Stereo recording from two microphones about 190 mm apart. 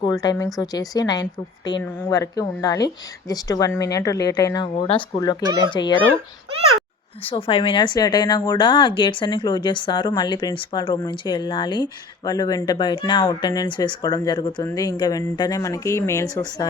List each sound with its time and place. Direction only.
0.0 s speech: 20° left (ahead or behind)
7.3 s speech: 30° left (ahead or behind)